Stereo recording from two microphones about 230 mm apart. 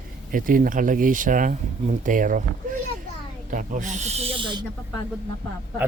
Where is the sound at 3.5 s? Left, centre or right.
Right.